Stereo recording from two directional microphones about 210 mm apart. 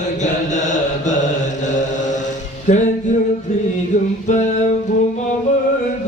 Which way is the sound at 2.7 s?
35° left (ahead or behind).